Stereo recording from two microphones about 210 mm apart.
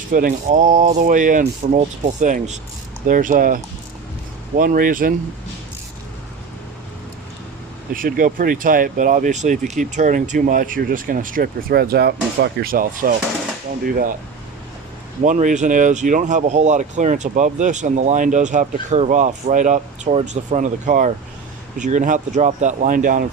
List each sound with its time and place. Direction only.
0.1 s speech: 40° right (ahead or behind)
7.9 s speech: 40° right (ahead or behind)
15.2 s speech: 35° right (ahead or behind)